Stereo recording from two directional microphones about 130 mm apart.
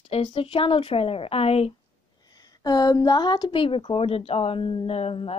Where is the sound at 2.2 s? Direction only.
30° left (ahead or behind).